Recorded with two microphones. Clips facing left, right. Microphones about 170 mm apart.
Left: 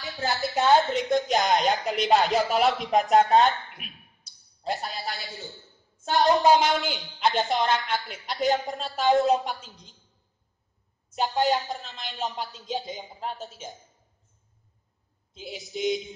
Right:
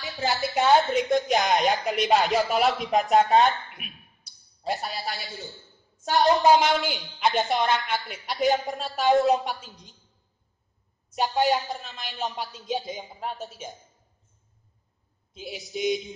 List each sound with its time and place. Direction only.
0.0 s a woman's voice: centre (ahead or behind)
0.6 s a woman's voice: 20° right (ahead or behind)
0.8 s speech: centre (ahead or behind)
11.2 s speech: centre (ahead or behind)
15.4 s speech: centre (ahead or behind)